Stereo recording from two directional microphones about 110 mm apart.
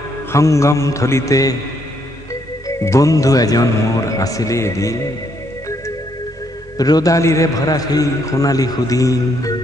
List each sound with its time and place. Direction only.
0.3 s music: 25° left (ahead or behind)
2.8 s a man's voice: 30° left (ahead or behind)
4.2 s music: 30° left (ahead or behind)
6.8 s a man's voice: 35° left (ahead or behind)